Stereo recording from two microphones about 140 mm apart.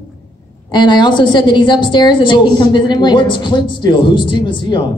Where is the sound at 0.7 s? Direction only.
35° left (ahead or behind).